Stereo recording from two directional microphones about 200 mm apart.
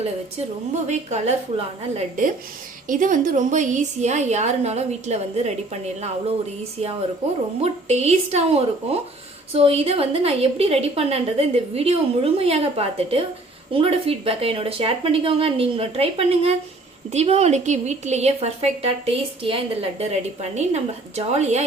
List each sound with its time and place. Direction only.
0.9 s a woman's voice: 35° right (ahead or behind)
7.6 s a woman's voice: 30° right (ahead or behind)